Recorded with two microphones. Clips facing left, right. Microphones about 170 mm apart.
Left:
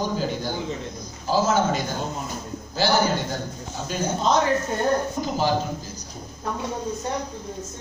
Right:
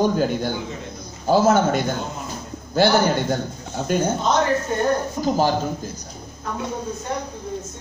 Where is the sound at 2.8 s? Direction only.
55° right (ahead or behind).